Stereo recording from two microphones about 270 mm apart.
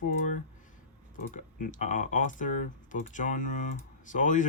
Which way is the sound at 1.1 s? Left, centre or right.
Left.